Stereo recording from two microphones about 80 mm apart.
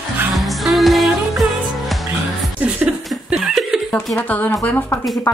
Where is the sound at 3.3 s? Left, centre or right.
Centre.